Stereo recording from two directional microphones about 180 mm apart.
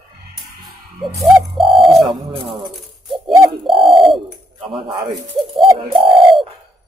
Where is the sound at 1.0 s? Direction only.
Centre (ahead or behind).